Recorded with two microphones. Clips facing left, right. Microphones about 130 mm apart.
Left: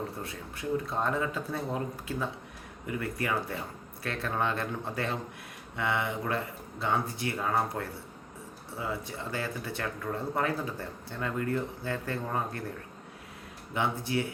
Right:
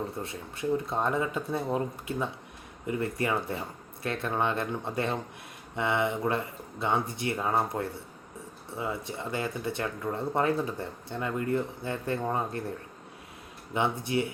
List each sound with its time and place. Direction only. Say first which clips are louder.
0.9 s speech: right 2 dB; 20° right (ahead or behind)
13.7 s speech: right 2 dB; 20° right (ahead or behind)